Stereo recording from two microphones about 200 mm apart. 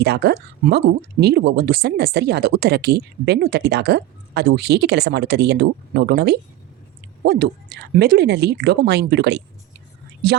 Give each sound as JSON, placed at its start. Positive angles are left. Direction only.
{"t": 0.0, "sound": "speech", "side_deg": -55}